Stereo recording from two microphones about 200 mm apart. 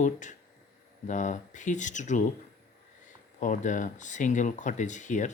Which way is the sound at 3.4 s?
40° left (ahead or behind).